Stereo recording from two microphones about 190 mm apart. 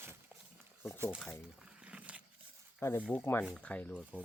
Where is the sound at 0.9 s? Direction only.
15° right (ahead or behind).